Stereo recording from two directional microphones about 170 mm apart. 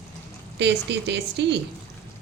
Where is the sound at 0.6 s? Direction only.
90° right.